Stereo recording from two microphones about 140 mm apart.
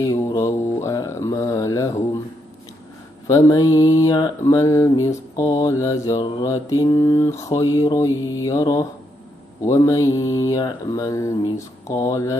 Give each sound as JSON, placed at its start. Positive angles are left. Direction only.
{"t": 0.0, "sound": "mantra", "side_deg": 25}
{"t": 0.8, "sound": "a sound", "side_deg": 20}
{"t": 3.3, "sound": "mantra", "side_deg": 25}